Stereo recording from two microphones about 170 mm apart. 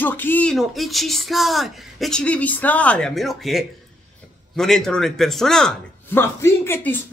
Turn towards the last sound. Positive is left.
turn(degrees=10)  # may be behind; listen again after turning